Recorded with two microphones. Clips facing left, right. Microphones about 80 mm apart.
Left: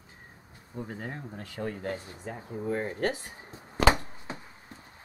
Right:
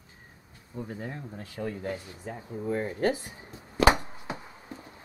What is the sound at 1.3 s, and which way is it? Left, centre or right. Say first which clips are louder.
Speech: even; left.